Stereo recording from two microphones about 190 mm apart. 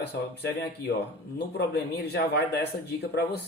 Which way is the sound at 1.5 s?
60° left (ahead or behind).